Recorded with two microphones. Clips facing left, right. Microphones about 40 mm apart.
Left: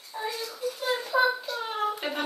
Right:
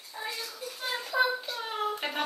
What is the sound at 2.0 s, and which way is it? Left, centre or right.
Speech, centre.